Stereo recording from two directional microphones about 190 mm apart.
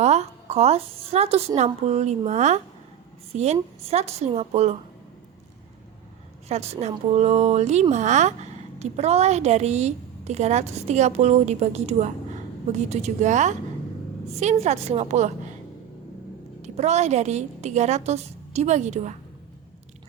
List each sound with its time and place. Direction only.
0.0 s speech: 35° right (ahead or behind)
6.5 s speech: 35° right (ahead or behind)
16.6 s speech: 35° right (ahead or behind)